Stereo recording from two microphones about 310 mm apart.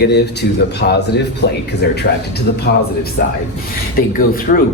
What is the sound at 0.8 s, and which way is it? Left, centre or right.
Speech, left.